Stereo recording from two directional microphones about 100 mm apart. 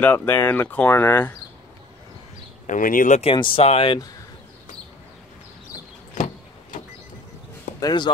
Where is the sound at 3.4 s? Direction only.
60° left (ahead or behind).